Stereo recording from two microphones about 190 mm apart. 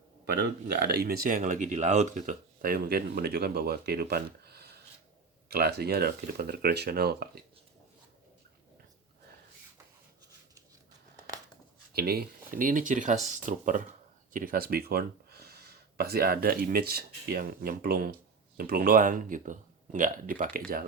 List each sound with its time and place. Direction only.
0.3 s speech: 60° right (ahead or behind)
11.9 s speech: 55° right (ahead or behind)